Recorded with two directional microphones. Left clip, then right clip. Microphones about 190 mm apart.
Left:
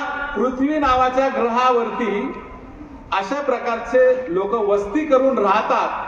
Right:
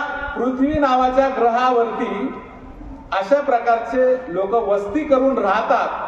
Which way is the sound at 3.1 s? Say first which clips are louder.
Right 4 dB; 25° right (ahead or behind).